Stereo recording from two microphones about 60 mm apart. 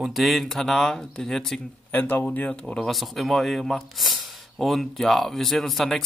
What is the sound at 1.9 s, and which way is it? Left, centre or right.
Speech, left.